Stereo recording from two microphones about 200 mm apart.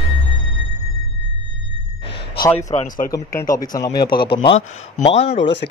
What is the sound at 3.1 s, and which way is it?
Speech, 15° left (ahead or behind).